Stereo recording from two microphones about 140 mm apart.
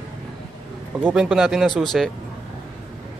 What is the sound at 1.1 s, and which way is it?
Speech, centre (ahead or behind).